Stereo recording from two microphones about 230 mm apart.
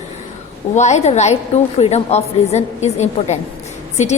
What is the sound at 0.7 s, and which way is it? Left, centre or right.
A woman's voice, left.